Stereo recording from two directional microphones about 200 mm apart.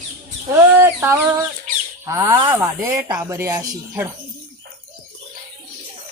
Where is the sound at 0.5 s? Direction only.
10° right (ahead or behind).